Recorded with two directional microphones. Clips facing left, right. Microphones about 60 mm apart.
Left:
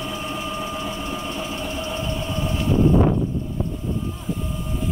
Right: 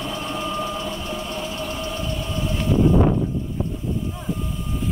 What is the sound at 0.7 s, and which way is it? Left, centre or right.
Vehicle, left.